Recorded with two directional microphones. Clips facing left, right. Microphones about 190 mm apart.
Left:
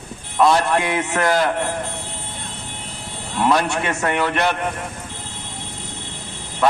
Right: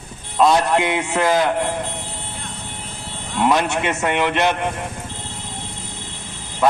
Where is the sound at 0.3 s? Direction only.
15° right (ahead or behind).